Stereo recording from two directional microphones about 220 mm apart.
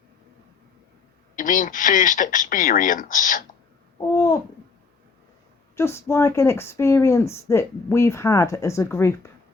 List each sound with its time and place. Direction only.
1.4 s speech: 35° left (ahead or behind)
4.1 s owl: 15° left (ahead or behind)
5.7 s speech: 10° left (ahead or behind)